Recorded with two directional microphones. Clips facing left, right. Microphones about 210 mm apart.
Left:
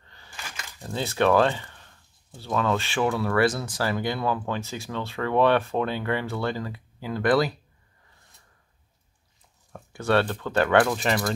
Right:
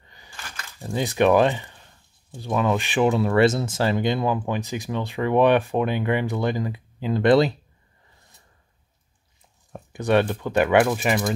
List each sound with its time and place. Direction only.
0.0 s a sound: 15° right (ahead or behind)
0.4 s keys jangling: 15° left (ahead or behind)
0.7 s speech: 15° right (ahead or behind)
9.7 s speech: 15° right (ahead or behind)